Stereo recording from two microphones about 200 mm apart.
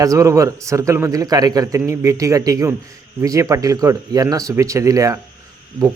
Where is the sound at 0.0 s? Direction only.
15° right (ahead or behind).